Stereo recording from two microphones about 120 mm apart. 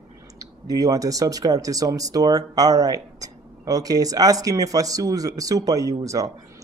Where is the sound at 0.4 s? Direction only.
30° right (ahead or behind).